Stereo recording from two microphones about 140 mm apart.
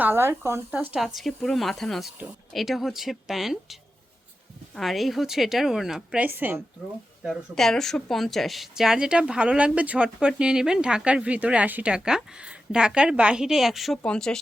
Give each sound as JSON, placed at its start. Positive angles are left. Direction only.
{"t": 0.0, "sound": "speech", "side_deg": -15}
{"t": 0.9, "sound": "speech", "side_deg": 0}
{"t": 7.2, "sound": "speech", "side_deg": 0}